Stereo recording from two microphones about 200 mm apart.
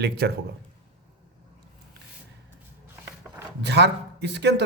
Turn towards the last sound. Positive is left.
turn(degrees=-60)  # may be behind; listen again after turning